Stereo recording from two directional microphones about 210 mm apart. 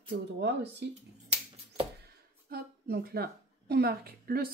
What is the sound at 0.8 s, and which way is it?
Speech, 55° right (ahead or behind).